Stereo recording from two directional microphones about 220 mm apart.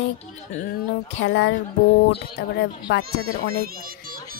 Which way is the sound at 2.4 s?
50° left (ahead or behind).